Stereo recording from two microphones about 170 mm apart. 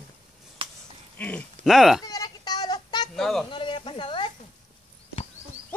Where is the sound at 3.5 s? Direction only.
30° left (ahead or behind).